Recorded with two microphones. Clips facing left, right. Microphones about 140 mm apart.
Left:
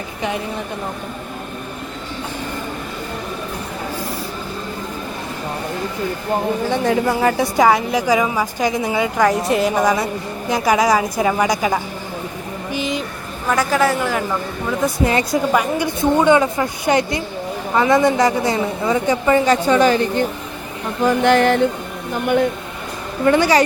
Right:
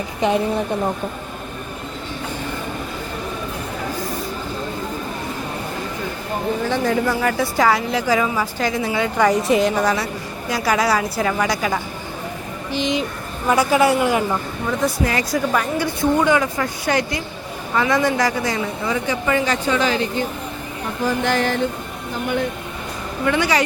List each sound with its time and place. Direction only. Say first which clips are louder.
6.7 s a woman's voice: left 2 dB; 25° left (ahead or behind)
9.1 s a woman's voice: right 1 dB; centre (ahead or behind)
9.7 s a woman's voice: left 3 dB; 15° left (ahead or behind)
12.7 s a woman's voice: right 2 dB; 5° left (ahead or behind)
13.5 s speech: right 1 dB; 10° right (ahead or behind)
15.0 s a woman's voice: left 3 dB; 25° left (ahead or behind)
19.7 s speech: left 5 dB; 50° left (ahead or behind)
21.0 s a sound: left 6 dB; 60° left (ahead or behind)
23.2 s speech: left 5 dB; 35° left (ahead or behind)